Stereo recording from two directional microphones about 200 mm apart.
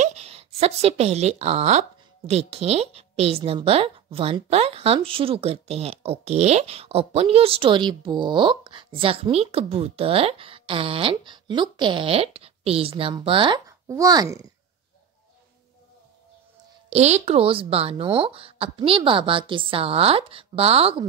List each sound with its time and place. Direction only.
0.0 s a woman's voice: 35° right (ahead or behind)
16.9 s a woman's voice: 30° right (ahead or behind)